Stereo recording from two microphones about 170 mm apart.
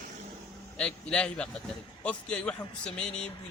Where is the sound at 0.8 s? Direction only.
5° left (ahead or behind).